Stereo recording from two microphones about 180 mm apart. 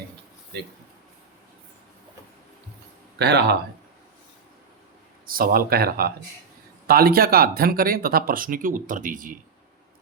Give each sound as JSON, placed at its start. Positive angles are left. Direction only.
{"t": 3.2, "sound": "speech", "side_deg": -70}
{"t": 5.2, "sound": "speech", "side_deg": -55}